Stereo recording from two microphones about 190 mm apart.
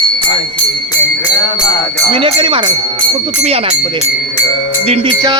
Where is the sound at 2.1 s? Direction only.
30° right (ahead or behind).